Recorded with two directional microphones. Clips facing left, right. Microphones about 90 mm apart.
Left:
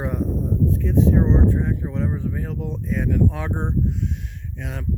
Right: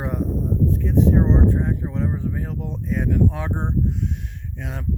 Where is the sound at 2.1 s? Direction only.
25° right (ahead or behind).